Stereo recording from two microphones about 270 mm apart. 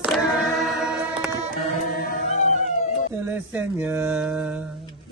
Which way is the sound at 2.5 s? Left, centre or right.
Left.